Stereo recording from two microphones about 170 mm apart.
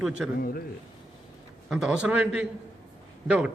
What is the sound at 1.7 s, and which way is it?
A man's voice, 5° right (ahead or behind).